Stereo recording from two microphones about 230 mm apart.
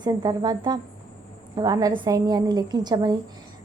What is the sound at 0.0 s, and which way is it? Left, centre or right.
A woman's voice, centre.